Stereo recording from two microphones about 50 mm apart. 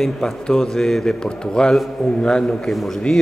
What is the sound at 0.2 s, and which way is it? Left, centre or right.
A man's voice, centre.